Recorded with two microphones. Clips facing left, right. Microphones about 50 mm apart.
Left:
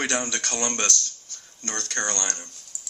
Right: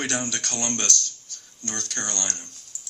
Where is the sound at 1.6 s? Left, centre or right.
Left.